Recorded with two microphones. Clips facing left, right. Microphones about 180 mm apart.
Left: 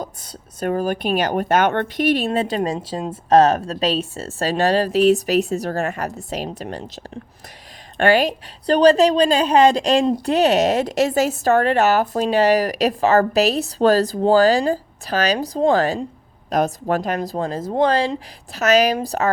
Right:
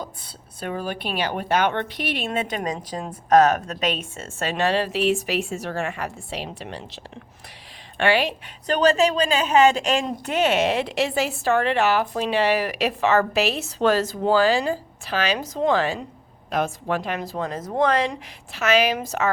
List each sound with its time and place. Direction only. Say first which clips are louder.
0.0 s a woman's voice: left 4 dB; 45° left (ahead or behind)